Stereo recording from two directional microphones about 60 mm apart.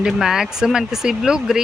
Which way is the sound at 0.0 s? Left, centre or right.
Centre.